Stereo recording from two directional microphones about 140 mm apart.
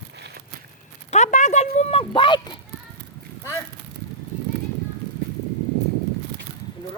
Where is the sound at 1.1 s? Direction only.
55° left (ahead or behind); by 2.6 s 35° left (ahead or behind).